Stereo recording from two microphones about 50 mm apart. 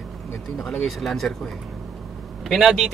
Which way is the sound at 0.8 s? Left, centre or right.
Centre.